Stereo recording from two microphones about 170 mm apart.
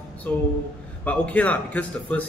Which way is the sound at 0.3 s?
10° left (ahead or behind).